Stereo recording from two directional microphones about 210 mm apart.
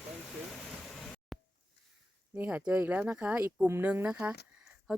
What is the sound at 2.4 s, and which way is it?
Speech, 5° right (ahead or behind).